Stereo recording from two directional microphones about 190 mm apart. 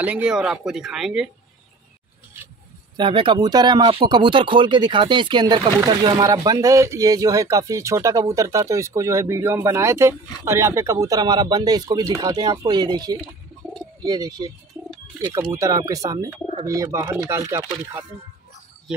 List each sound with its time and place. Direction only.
0.0 s speech: 5° right (ahead or behind)
3.0 s speech: 25° right (ahead or behind)
15.5 s speech: 15° right (ahead or behind)